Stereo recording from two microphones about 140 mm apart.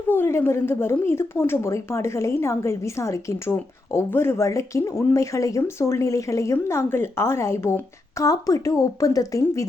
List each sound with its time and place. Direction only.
0.1 s speech: 15° left (ahead or behind)